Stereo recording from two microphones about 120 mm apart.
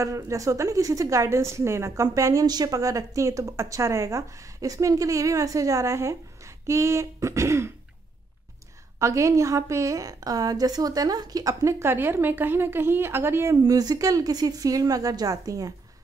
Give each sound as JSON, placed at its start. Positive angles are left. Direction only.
{"t": 0.0, "sound": "a woman's voice", "side_deg": -25}
{"t": 9.0, "sound": "a woman's voice", "side_deg": -25}